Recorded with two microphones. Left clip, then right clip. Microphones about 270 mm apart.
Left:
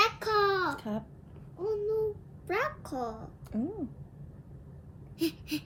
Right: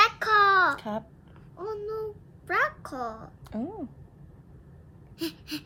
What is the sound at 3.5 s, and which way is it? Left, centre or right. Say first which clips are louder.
Speech: right 1 dB; right.